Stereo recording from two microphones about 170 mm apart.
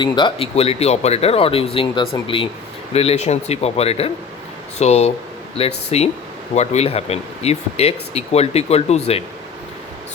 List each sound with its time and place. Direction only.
0.0 s speech: 25° left (ahead or behind)